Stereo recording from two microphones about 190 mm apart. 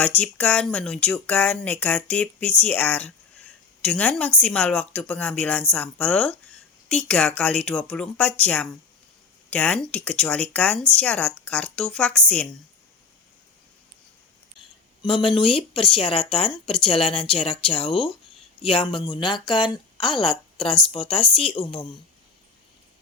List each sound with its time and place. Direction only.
0.0 s a woman's voice: 10° left (ahead or behind)
15.0 s speech: 30° left (ahead or behind)